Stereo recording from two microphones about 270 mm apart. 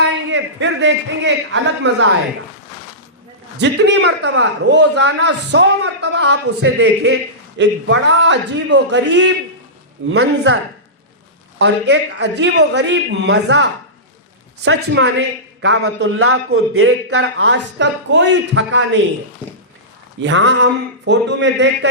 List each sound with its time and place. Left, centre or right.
0.0 s a man's voice: right
3.6 s a man's voice: right
11.6 s a man's voice: right
20.2 s a man's voice: right